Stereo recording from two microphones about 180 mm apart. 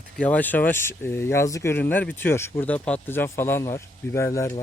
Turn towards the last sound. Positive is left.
turn(degrees=15)  # may be behind; listen again after turning